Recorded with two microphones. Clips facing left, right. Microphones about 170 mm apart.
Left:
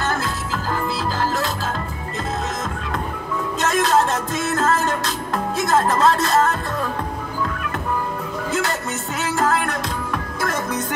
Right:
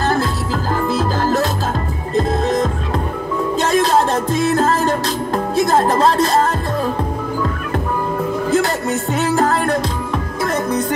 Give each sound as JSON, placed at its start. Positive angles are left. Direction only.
{"t": 0.0, "sound": "music", "side_deg": -35}
{"t": 8.5, "sound": "music", "side_deg": -35}